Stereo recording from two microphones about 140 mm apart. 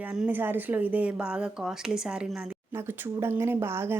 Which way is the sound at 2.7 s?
15° right (ahead or behind).